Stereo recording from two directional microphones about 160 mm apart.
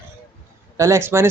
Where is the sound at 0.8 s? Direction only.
20° right (ahead or behind).